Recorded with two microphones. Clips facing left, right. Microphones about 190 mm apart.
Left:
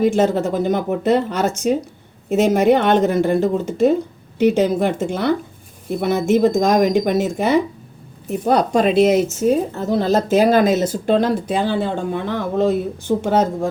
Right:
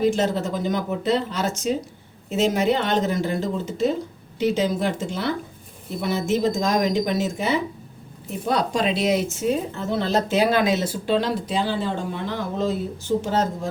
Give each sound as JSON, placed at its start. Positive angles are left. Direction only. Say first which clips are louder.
{"t": 0.0, "sound": "a woman's voice", "louder": "left 5 dB", "side_deg": 55}